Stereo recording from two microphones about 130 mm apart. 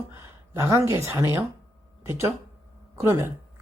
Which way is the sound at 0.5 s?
20° right (ahead or behind).